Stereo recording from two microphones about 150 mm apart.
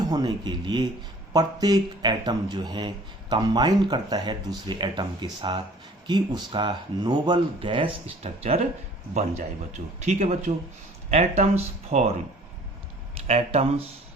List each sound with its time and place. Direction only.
0.0 s a man's voice: 30° right (ahead or behind); by 13.8 s 45° right (ahead or behind)